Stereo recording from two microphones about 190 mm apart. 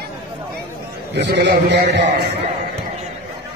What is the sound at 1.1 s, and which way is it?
Speech, 60° right (ahead or behind).